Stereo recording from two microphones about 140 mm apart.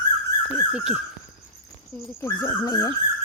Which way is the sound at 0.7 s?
5° right (ahead or behind).